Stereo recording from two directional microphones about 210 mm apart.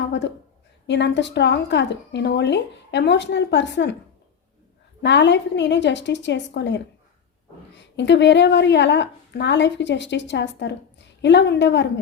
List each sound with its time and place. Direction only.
0.1 s a woman's voice: 55° left (ahead or behind)
5.0 s a woman's voice: 55° left (ahead or behind)
7.9 s a woman's voice: 55° left (ahead or behind)